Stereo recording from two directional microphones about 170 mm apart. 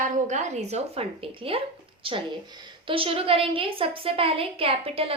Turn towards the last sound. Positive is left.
turn(degrees=-35)  # may be behind; listen again after turning